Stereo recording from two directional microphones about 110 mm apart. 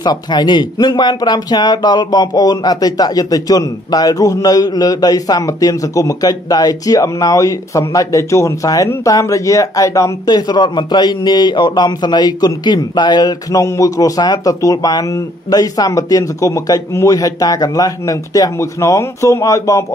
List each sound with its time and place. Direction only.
0.0 s speech: 40° left (ahead or behind)